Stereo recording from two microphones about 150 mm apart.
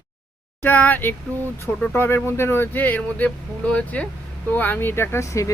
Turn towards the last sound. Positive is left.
turn(degrees=20)  # may be behind; listen again after turning